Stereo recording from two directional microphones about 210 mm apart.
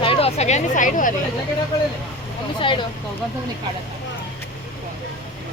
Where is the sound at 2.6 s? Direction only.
25° left (ahead or behind).